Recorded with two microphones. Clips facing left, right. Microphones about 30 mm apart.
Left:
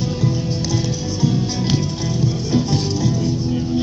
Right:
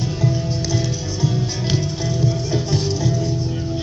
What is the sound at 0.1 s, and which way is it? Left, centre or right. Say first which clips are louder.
Music: left 1 dB; left.